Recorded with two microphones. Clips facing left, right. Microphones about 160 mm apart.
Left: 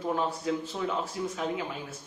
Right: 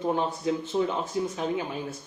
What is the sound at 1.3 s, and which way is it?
Speech, 30° right (ahead or behind).